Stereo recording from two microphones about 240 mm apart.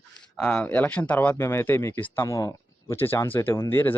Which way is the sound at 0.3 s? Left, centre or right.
Centre.